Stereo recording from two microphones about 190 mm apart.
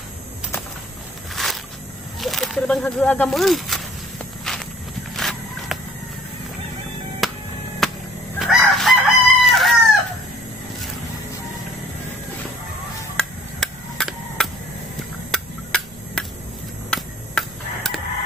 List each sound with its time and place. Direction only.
1.3 s a sound: centre (ahead or behind)
2.1 s speech: centre (ahead or behind)
4.5 s walk: centre (ahead or behind)
5.1 s horse: centre (ahead or behind)
7.2 s music: centre (ahead or behind)
7.8 s a sound: centre (ahead or behind)
8.4 s chicken: centre (ahead or behind)
13.1 s music: 5° left (ahead or behind)
15.3 s a sound: 5° left (ahead or behind)